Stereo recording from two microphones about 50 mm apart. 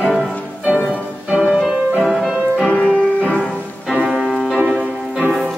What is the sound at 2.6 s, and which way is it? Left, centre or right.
Music, left.